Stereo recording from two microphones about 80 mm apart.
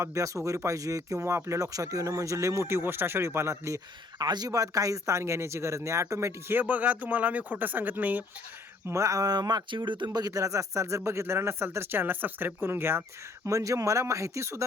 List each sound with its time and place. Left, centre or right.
0.0 s speech: right
4.2 s speech: right
8.9 s speech: right
9.6 s speech: right
10.1 s speech: right
13.4 s speech: right